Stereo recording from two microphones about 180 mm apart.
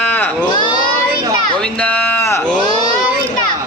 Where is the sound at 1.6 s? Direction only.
5° left (ahead or behind).